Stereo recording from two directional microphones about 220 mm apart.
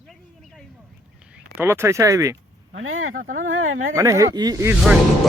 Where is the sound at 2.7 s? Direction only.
65° right (ahead or behind).